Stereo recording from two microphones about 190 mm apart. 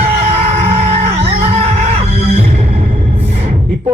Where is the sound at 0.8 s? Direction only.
35° right (ahead or behind).